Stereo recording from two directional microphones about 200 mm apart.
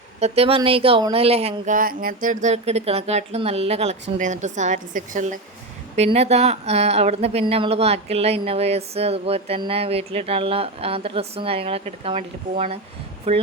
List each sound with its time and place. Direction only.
0.2 s speech: 30° right (ahead or behind)